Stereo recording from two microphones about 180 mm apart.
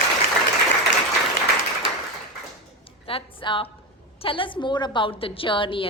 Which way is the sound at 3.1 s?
30° left (ahead or behind).